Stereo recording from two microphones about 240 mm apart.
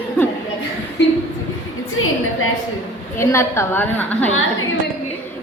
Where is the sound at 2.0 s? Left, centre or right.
Left.